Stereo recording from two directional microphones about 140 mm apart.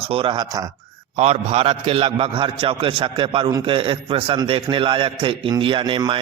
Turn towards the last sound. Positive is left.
turn(degrees=-35)  # may be behind; listen again after turning